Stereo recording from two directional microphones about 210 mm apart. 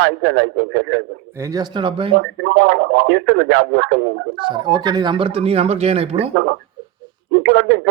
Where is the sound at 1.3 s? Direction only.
15° right (ahead or behind).